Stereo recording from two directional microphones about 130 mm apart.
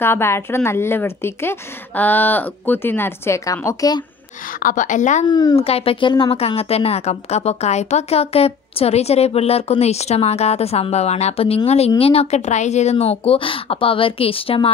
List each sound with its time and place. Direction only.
0.0 s a woman's voice: 20° left (ahead or behind)
4.6 s a woman's voice: 85° left
5.2 s a woman's voice: 30° left (ahead or behind)
5.6 s a woman's voice: 50° left (ahead or behind)